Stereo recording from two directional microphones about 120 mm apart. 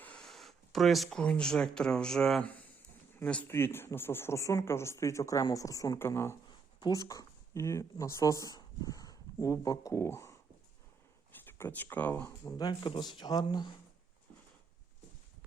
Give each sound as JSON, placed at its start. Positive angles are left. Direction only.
{"t": 0.0, "sound": "a sound", "side_deg": 5}
{"t": 1.2, "sound": "speech", "side_deg": 10}
{"t": 6.7, "sound": "speech", "side_deg": 35}
{"t": 12.5, "sound": "speech", "side_deg": 35}